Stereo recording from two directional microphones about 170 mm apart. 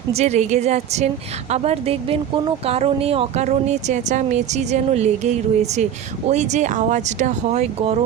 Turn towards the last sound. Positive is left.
turn(degrees=-35)  # may be behind; listen again after turning